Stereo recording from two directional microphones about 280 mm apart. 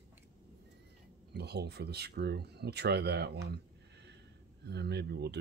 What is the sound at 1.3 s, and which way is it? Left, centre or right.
Speech, right.